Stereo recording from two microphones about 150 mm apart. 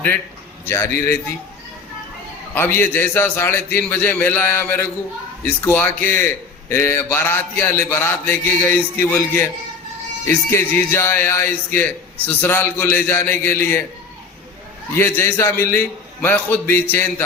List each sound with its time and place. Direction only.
0.6 s speech: 15° left (ahead or behind)
2.6 s speech: 15° left (ahead or behind)
14.9 s speech: 15° left (ahead or behind)